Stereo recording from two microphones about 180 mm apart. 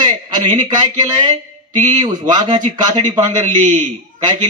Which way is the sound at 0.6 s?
25° right (ahead or behind).